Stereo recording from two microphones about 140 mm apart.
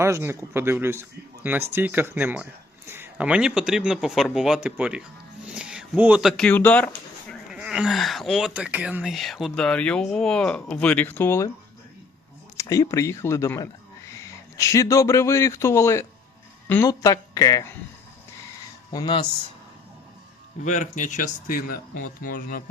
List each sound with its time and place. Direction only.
0.0 s speech: 20° right (ahead or behind)
5.5 s a sound: 5° right (ahead or behind)
6.3 s speech: 10° left (ahead or behind)
7.5 s speech: 5° right (ahead or behind); by 11.5 s 20° left (ahead or behind)
12.5 s a man's voice: 25° left (ahead or behind)
18.9 s speech: 30° left (ahead or behind)
20.7 s speech: 60° left (ahead or behind); by 22.6 s 80° left